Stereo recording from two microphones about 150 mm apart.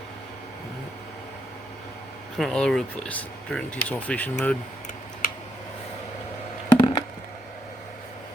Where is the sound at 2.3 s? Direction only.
5° left (ahead or behind).